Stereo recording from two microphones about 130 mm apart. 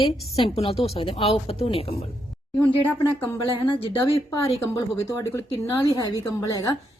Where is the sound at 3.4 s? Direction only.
40° left (ahead or behind).